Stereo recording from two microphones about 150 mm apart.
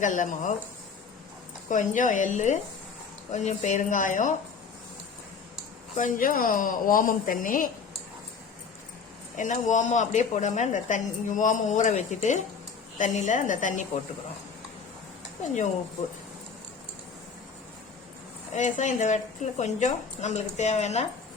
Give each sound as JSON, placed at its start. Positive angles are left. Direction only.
{"t": 0.0, "sound": "a woman's voice", "side_deg": 60}
{"t": 1.7, "sound": "a woman's voice", "side_deg": 60}
{"t": 6.0, "sound": "a woman's voice", "side_deg": 65}
{"t": 9.3, "sound": "a woman's voice", "side_deg": 55}
{"t": 18.5, "sound": "a woman's voice", "side_deg": 55}